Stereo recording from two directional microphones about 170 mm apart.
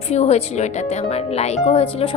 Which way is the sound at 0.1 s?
40° left (ahead or behind).